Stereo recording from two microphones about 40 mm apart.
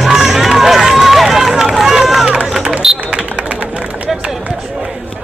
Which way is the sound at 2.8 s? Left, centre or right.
Centre.